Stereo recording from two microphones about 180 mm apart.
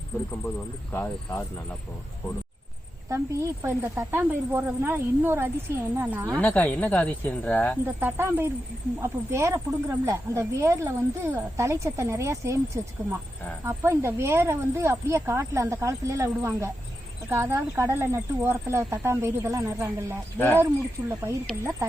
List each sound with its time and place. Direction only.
0.9 s speech: 15° left (ahead or behind)
3.1 s speech: 15° right (ahead or behind)
6.3 s speech: 10° left (ahead or behind)
7.9 s speech: 10° right (ahead or behind)